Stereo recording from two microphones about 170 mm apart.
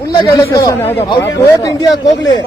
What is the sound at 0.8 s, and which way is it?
Speech, 35° left (ahead or behind).